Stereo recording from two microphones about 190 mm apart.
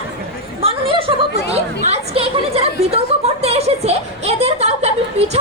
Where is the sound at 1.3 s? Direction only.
35° right (ahead or behind).